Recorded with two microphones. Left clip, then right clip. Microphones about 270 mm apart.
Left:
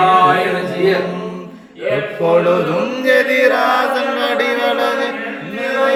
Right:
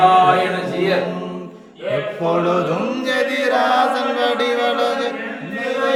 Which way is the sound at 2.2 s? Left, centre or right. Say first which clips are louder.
Left 6 dB; centre.